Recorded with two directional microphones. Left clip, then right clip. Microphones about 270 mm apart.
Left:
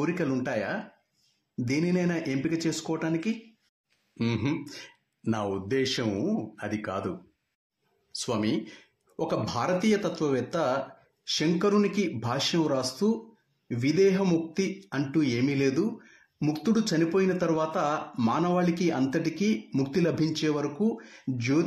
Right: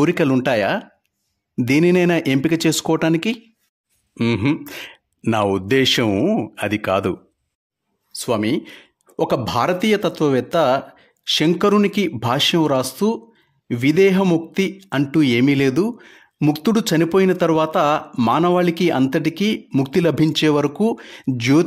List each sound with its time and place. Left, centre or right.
0.0 s speech: right
8.2 s speech: right